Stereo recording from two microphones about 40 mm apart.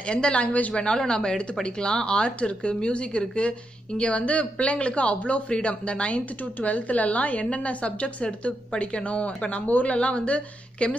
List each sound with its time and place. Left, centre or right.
0.0 s a woman's voice: left
0.7 s a woman's voice: left